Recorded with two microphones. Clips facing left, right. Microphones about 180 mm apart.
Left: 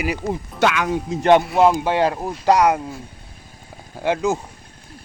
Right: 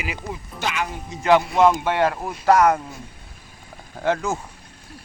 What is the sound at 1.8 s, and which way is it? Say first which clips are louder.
Speech: left 2 dB; 30° left (ahead or behind).